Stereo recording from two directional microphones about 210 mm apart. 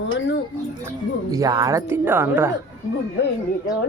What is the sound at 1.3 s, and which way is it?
Speech, 15° right (ahead or behind).